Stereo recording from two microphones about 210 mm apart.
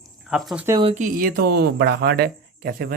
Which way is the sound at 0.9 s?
35° right (ahead or behind).